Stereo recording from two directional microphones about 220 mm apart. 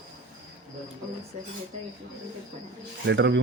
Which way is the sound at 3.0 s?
55° right (ahead or behind).